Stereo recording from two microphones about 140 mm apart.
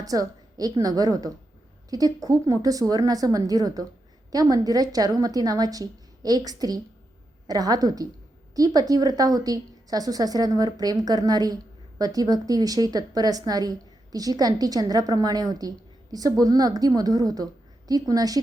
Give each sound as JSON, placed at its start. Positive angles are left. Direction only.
{"t": 0.0, "sound": "a woman's voice", "side_deg": -25}